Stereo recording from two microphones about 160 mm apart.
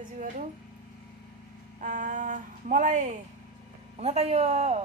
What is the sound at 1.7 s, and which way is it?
Speech, 55° right (ahead or behind).